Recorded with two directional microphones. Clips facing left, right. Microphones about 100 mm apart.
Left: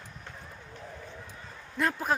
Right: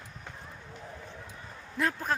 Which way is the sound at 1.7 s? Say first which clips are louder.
Left 2 dB; 5° left (ahead or behind).